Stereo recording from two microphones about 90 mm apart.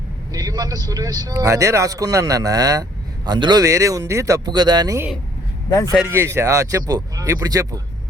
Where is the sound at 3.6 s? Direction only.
35° right (ahead or behind).